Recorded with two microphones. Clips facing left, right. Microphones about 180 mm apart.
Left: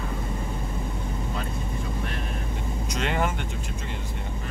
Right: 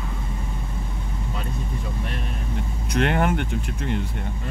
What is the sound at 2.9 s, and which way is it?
Speech, 60° right (ahead or behind).